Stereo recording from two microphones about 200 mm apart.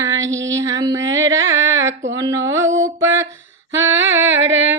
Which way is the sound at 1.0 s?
70° right (ahead or behind).